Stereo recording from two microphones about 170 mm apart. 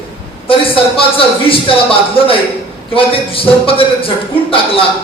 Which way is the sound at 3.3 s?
30° left (ahead or behind).